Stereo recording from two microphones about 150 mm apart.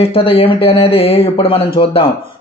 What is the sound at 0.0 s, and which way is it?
Speech, 40° left (ahead or behind).